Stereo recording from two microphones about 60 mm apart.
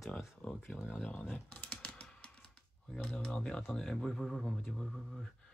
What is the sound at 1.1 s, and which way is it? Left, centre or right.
Speech, left.